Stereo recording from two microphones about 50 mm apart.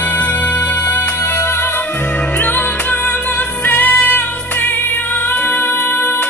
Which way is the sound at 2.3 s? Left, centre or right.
Left.